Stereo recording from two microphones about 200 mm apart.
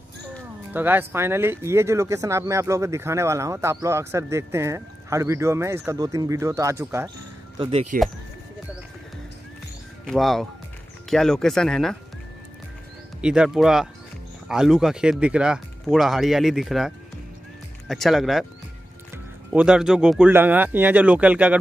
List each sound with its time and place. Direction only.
0.7 s speech: 10° right (ahead or behind)
7.5 s speech: 25° right (ahead or behind)
10.0 s speech: centre (ahead or behind)
13.2 s speech: 5° right (ahead or behind)
19.5 s speech: 5° right (ahead or behind)